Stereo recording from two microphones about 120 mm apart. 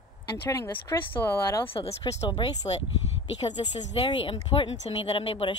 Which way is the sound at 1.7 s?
55° left (ahead or behind).